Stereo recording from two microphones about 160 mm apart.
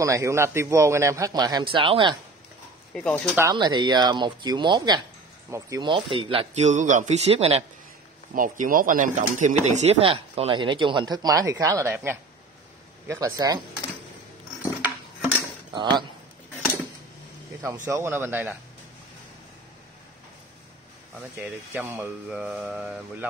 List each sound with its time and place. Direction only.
0.0 s a man's voice: 20° right (ahead or behind)
2.9 s speech: 5° left (ahead or behind)
3.5 s a man's voice: 30° right (ahead or behind)
8.4 s a man's voice: 60° right (ahead or behind); by 13.6 s 20° right (ahead or behind)
15.7 s speech: 30° right (ahead or behind)
17.8 s speech: 15° right (ahead or behind)
21.4 s speech: 15° right (ahead or behind)